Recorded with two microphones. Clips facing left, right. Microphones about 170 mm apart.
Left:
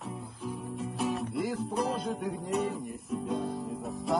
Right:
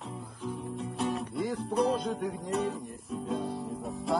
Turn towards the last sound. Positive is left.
turn(degrees=0)  # may be behind; listen again after turning